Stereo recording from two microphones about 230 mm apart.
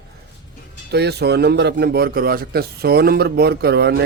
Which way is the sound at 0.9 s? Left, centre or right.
Right.